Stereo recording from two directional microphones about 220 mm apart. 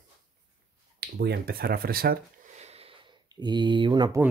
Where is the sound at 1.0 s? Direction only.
45° right (ahead or behind); by 4.2 s 20° right (ahead or behind).